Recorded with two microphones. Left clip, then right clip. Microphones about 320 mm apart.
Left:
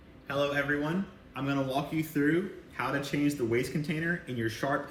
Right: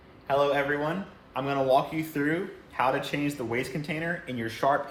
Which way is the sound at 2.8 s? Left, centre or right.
Right.